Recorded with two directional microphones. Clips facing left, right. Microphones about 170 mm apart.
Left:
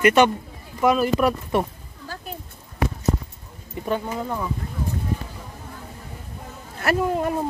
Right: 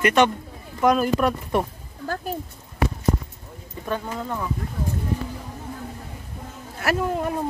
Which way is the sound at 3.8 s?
15° left (ahead or behind).